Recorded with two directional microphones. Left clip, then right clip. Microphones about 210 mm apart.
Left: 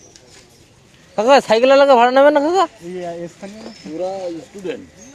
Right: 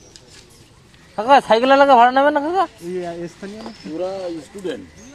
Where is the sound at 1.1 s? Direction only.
55° left (ahead or behind).